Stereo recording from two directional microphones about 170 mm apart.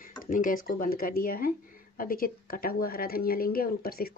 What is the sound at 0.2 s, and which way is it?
Speech, 55° left (ahead or behind).